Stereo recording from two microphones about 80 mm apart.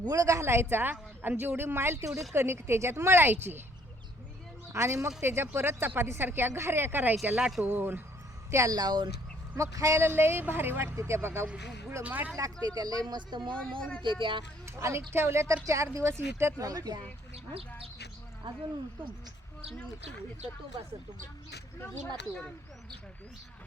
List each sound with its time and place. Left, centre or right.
0.0 s speech: right
4.7 s speech: right
7.3 s speech: centre
7.6 s speech: right
8.4 s a woman's voice: right
9.6 s speech: right
11.4 s speech: centre
12.4 s speech: right
14.0 s speech: right
14.8 s speech: right
16.6 s a woman's voice: right
18.4 s speech: right
22.0 s speech: centre